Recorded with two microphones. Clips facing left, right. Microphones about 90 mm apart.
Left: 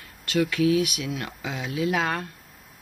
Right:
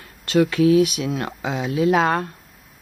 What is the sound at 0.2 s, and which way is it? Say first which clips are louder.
Speech: right 6 dB; 35° right (ahead or behind).